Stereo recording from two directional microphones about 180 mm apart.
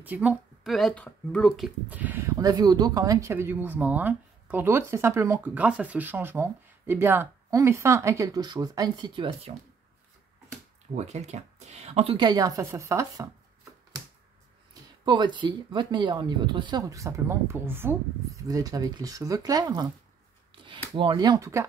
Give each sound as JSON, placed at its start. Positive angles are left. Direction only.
{"t": 0.0, "sound": "speech", "side_deg": -10}
{"t": 1.9, "sound": "speech", "side_deg": -10}
{"t": 11.0, "sound": "speech", "side_deg": -40}
{"t": 14.7, "sound": "speech", "side_deg": -25}
{"t": 20.5, "sound": "a sound", "side_deg": -25}
{"t": 20.9, "sound": "speech", "side_deg": -30}